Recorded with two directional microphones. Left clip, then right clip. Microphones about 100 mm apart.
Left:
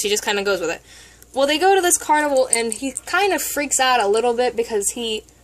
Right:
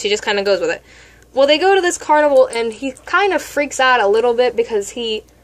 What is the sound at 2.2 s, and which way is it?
Speech, 40° left (ahead or behind).